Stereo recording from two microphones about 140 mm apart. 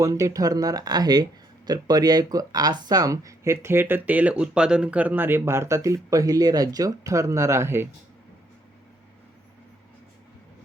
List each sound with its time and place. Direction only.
0.0 s speech: 25° right (ahead or behind)